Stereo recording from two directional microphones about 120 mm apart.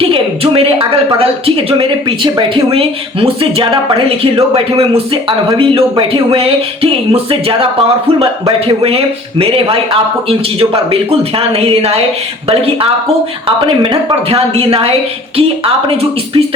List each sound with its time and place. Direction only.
0.0 s speech: 50° right (ahead or behind)